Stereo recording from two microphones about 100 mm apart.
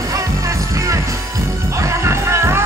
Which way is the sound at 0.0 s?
35° right (ahead or behind).